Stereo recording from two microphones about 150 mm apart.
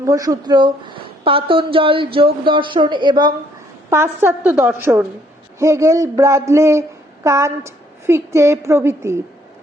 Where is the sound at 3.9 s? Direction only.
15° right (ahead or behind).